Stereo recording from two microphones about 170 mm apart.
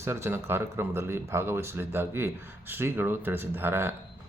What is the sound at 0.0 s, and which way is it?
Speech, 15° right (ahead or behind).